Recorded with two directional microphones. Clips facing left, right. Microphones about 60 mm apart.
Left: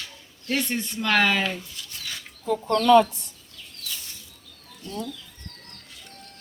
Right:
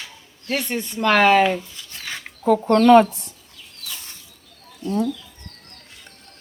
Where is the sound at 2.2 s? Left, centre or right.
Right.